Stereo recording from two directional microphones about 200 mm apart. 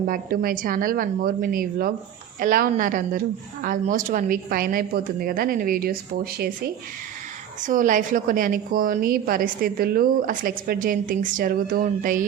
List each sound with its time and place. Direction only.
0.1 s a woman's voice: 45° right (ahead or behind)
7.6 s a woman's voice: 40° right (ahead or behind)